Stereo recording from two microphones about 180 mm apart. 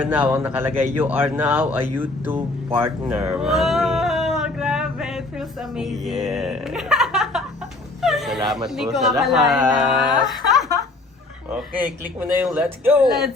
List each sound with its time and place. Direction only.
0.0 s a man's voice: 10° right (ahead or behind)
2.7 s a sound: 10° right (ahead or behind)
8.0 s whimper: centre (ahead or behind)
8.4 s speech: centre (ahead or behind)
12.2 s speech: 5° right (ahead or behind)